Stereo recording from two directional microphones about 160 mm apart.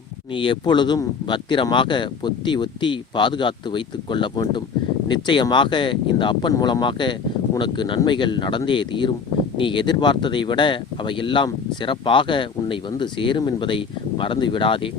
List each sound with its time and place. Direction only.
0.3 s speech: 30° left (ahead or behind)